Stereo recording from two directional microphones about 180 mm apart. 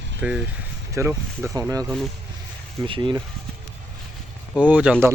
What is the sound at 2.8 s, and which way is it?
Speech, 25° right (ahead or behind).